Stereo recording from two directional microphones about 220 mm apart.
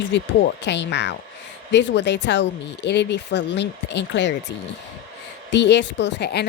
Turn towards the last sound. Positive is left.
turn(degrees=50)  # may be behind; listen again after turning